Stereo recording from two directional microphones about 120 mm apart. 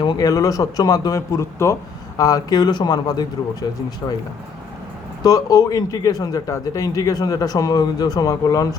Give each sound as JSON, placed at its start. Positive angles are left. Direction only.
{"t": 0.0, "sound": "speech", "side_deg": 35}
{"t": 5.2, "sound": "speech", "side_deg": 30}